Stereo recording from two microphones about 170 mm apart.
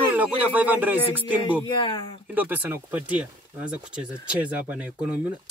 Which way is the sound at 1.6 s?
25° left (ahead or behind).